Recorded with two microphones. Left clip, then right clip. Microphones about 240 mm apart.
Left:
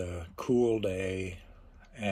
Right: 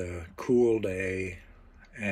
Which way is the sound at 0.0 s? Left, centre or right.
Centre.